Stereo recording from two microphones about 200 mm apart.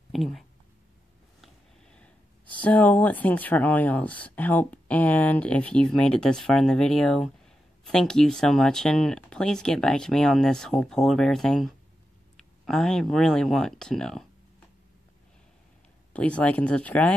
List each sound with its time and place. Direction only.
0.1 s speech: centre (ahead or behind)
1.4 s a sound: 5° left (ahead or behind)
2.5 s speech: 5° left (ahead or behind)
16.1 s speech: 5° left (ahead or behind)